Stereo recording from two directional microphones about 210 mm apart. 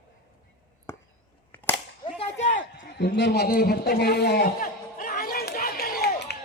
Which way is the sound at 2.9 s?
55° left (ahead or behind).